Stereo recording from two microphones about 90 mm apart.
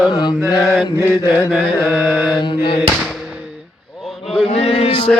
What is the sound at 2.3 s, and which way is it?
Music, 65° left (ahead or behind).